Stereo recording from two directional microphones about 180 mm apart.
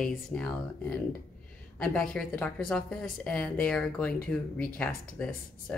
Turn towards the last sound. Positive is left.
turn(degrees=5)  # may be behind; listen again after turning